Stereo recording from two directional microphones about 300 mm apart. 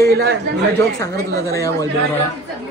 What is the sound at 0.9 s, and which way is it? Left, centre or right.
Speech, centre.